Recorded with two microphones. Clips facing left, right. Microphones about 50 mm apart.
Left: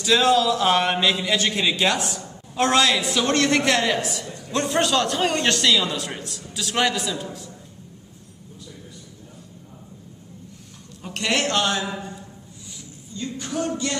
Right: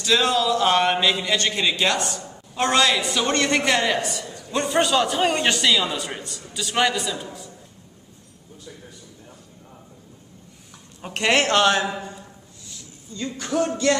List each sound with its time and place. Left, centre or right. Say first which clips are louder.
0.0 s a man's voice: left 2 dB; centre
11.0 s a man's voice: right 4 dB; right
11.8 s speech: right 2 dB; right
13.2 s a man's voice: right 3 dB; right